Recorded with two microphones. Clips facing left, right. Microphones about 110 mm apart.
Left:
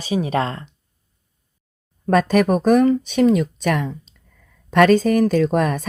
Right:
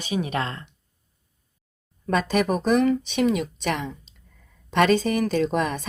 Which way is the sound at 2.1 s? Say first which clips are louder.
Left 6 dB; 50° left (ahead or behind).